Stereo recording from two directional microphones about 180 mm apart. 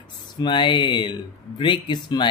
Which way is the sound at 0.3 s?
25° left (ahead or behind).